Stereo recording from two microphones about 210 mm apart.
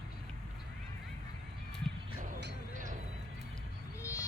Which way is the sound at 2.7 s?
40° right (ahead or behind).